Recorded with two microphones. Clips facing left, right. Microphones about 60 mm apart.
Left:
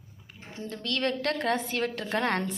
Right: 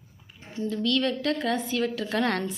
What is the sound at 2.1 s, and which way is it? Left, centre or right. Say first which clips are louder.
Speech: even; left.